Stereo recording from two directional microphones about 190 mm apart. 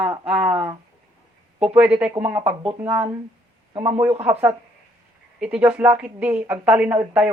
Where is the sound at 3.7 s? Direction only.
25° right (ahead or behind).